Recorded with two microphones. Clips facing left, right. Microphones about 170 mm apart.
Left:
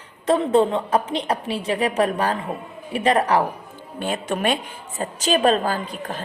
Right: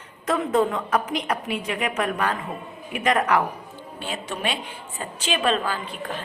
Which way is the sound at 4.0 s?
50° left (ahead or behind).